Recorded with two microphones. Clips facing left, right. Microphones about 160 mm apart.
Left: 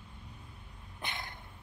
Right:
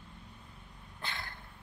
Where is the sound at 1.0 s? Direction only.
20° left (ahead or behind).